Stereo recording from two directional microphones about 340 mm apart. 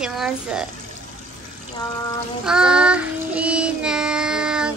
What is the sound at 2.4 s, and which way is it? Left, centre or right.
Child singing, centre.